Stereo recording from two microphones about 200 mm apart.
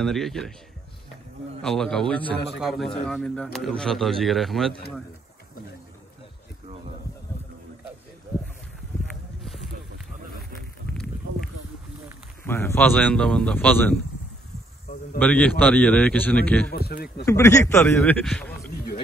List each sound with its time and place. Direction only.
0.0 s speech: centre (ahead or behind)
1.6 s speech: 5° left (ahead or behind)
9.4 s a sound: centre (ahead or behind)
12.4 s a man's voice: 10° left (ahead or behind)
15.1 s a man's voice: 5° left (ahead or behind)
16.7 s speech: 50° left (ahead or behind)
17.3 s a man's voice: 15° left (ahead or behind)